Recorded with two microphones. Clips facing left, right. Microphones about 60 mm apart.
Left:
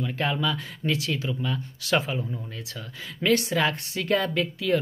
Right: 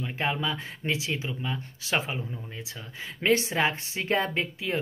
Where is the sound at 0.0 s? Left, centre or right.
Right.